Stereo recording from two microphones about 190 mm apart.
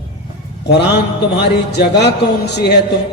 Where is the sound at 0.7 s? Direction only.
60° left (ahead or behind).